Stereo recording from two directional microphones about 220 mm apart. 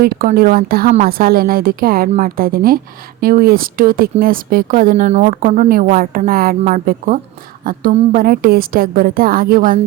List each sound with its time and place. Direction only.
0.0 s speech: 40° right (ahead or behind)